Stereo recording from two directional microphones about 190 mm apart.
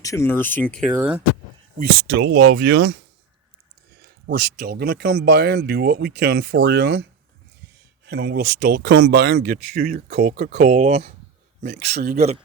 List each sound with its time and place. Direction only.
0.0 s speech: 15° left (ahead or behind)
0.9 s speech: 10° right (ahead or behind)
1.8 s speech: 60° right (ahead or behind)
10.6 s speech: 35° right (ahead or behind)
11.7 s speech: 60° right (ahead or behind)
12.1 s speech: 35° right (ahead or behind)